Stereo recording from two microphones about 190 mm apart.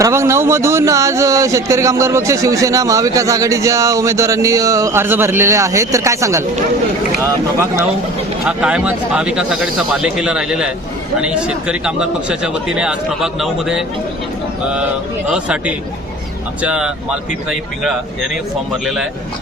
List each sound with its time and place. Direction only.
0.0 s speech: 15° right (ahead or behind)
8.4 s speech: 5° right (ahead or behind)
15.3 s speech: 5° right (ahead or behind)